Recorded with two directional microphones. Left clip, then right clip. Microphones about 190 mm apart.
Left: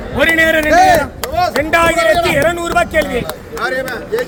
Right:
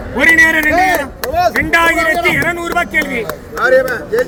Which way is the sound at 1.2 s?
Centre (ahead or behind).